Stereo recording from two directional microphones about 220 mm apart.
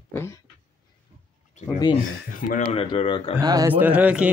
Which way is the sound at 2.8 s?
25° left (ahead or behind).